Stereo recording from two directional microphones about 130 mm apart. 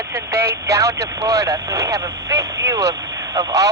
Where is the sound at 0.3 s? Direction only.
25° right (ahead or behind).